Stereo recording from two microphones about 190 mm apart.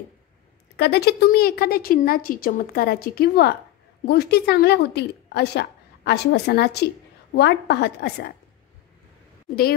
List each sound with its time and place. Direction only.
0.7 s a woman's voice: 60° left (ahead or behind)